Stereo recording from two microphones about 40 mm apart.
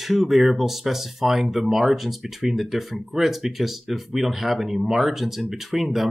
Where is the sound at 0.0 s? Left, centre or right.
Centre.